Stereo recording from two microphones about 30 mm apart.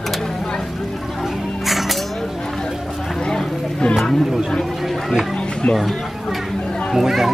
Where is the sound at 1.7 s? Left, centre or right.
Centre.